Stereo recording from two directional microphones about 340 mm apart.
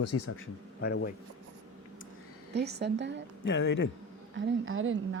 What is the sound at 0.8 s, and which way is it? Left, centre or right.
Speech, left.